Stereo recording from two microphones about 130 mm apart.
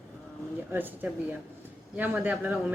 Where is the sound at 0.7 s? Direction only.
15° right (ahead or behind).